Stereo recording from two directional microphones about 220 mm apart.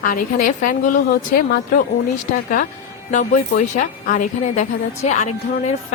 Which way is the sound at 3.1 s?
35° left (ahead or behind).